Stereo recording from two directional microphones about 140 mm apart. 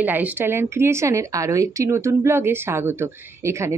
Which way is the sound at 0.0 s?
10° right (ahead or behind).